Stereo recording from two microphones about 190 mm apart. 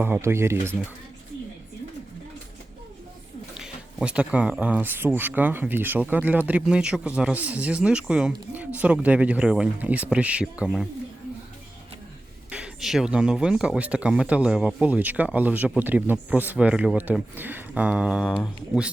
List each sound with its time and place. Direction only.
0.0 s speech: 10° right (ahead or behind)
3.5 s speech: 5° right (ahead or behind)
12.5 s speech: 5° right (ahead or behind)